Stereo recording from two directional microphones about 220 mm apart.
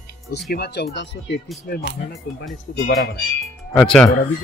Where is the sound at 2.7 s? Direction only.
45° left (ahead or behind).